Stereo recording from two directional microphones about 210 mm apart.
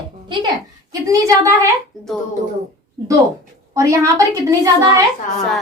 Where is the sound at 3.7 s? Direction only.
15° right (ahead or behind).